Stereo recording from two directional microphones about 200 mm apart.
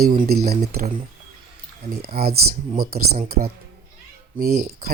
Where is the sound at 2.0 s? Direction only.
50° right (ahead or behind).